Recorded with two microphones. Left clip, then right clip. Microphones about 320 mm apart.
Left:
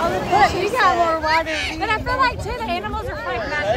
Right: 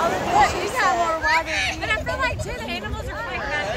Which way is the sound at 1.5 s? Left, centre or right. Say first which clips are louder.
Even; right.